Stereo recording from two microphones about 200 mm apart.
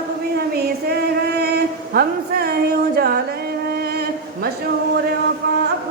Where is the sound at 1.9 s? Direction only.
50° right (ahead or behind).